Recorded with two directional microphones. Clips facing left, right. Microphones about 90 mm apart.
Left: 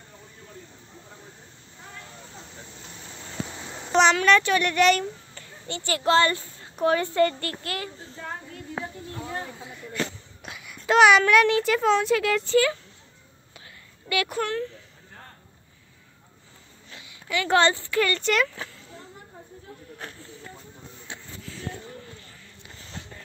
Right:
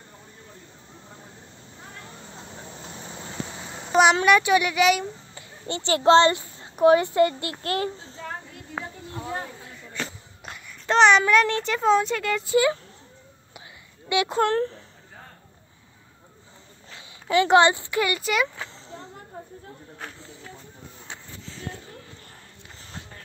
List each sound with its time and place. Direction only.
2.7 s vehicle: 30° right (ahead or behind)
3.4 s a sound: 5° right (ahead or behind)
4.1 s speech: 15° right (ahead or behind)
5.7 s a woman's voice: 25° right (ahead or behind)
7.6 s a child's voice: 30° right (ahead or behind)
10.4 s a child's voice: 5° left (ahead or behind)
12.4 s a woman's voice: 20° right (ahead or behind)
14.0 s speech: 20° right (ahead or behind)
14.5 s speech: 40° right (ahead or behind)
16.9 s speech: 30° right (ahead or behind); by 18.5 s 10° right (ahead or behind)
18.7 s a sound: 25° right (ahead or behind)
19.3 s snake: 60° right (ahead or behind)